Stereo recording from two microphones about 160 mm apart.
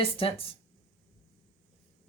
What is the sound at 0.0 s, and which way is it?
Speech, 35° left (ahead or behind).